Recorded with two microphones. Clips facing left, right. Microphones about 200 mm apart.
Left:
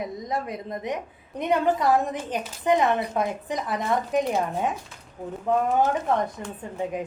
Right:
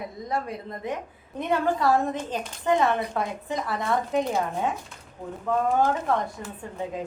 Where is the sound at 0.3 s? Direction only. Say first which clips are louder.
Right 3 dB; 20° left (ahead or behind).